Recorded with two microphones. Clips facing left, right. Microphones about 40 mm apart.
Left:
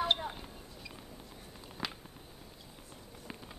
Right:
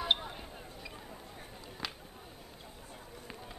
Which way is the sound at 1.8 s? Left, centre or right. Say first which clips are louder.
Left 2 dB; centre.